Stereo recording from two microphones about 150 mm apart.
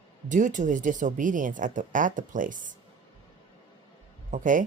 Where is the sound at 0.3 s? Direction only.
55° right (ahead or behind).